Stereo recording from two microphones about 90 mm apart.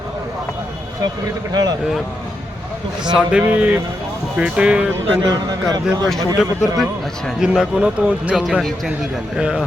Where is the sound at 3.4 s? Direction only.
20° right (ahead or behind).